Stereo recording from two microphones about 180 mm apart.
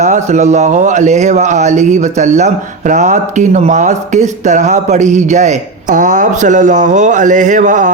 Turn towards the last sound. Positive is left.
turn(degrees=-45)  # may be behind; listen again after turning